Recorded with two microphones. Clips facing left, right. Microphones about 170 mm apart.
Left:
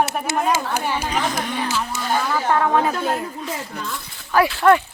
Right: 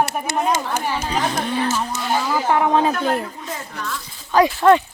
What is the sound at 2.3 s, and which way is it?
Speech, 10° right (ahead or behind).